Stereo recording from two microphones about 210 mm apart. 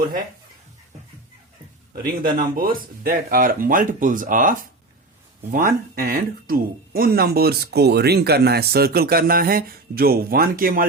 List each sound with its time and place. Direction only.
2.2 s speech: 40° right (ahead or behind)